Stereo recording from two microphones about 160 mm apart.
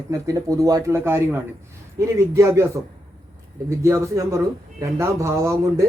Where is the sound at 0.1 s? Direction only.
20° right (ahead or behind).